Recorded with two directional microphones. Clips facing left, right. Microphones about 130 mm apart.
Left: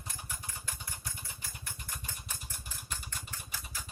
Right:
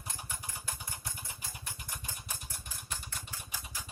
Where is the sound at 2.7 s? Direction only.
Centre (ahead or behind).